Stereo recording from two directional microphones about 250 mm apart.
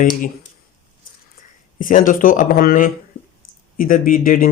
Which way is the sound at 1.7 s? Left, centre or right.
Left.